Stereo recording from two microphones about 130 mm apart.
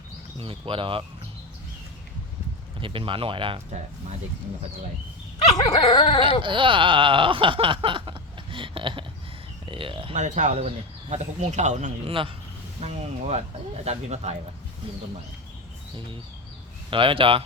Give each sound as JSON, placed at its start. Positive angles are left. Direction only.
{"t": 0.3, "sound": "speech", "side_deg": -45}
{"t": 2.8, "sound": "speech", "side_deg": -40}
{"t": 5.7, "sound": "dog", "side_deg": 45}
{"t": 6.4, "sound": "speech", "side_deg": -40}
{"t": 10.2, "sound": "speech", "side_deg": -70}
{"t": 10.5, "sound": "speech", "side_deg": -45}
{"t": 12.0, "sound": "speech", "side_deg": -45}
{"t": 12.8, "sound": "speech", "side_deg": -55}
{"t": 16.9, "sound": "speech", "side_deg": -40}